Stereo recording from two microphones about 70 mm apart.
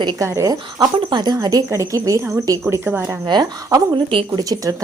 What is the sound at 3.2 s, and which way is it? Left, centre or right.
Speech, right.